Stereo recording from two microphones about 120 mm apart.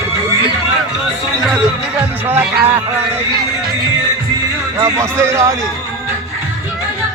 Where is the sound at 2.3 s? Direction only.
15° right (ahead or behind).